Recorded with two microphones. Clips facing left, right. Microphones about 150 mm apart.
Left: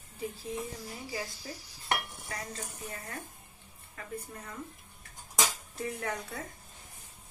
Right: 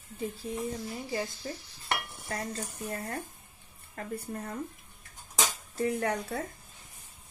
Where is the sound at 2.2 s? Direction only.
45° right (ahead or behind).